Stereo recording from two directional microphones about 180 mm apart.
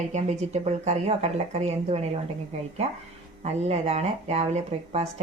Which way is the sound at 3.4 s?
40° right (ahead or behind).